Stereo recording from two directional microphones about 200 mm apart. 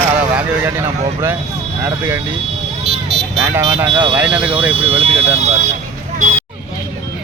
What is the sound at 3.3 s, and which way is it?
Speech, 20° right (ahead or behind).